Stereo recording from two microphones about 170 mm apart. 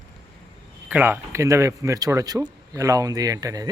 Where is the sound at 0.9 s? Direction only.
10° right (ahead or behind).